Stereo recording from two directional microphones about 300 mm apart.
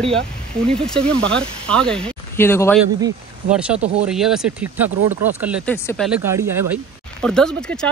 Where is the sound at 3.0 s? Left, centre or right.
Centre.